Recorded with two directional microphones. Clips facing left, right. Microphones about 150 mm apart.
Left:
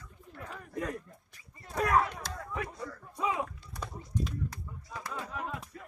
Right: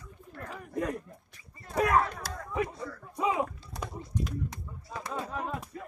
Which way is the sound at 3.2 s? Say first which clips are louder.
Right 4 dB; 20° right (ahead or behind).